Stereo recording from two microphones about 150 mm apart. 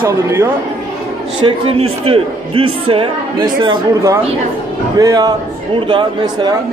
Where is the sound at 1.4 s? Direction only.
35° right (ahead or behind).